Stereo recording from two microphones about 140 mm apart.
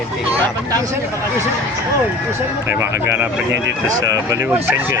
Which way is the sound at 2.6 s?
20° right (ahead or behind).